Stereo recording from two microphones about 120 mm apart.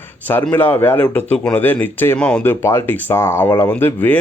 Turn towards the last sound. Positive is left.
turn(degrees=15)  # may be behind; listen again after turning